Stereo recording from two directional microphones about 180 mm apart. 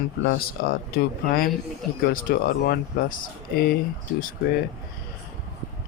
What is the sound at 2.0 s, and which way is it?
Speech, 55° left (ahead or behind).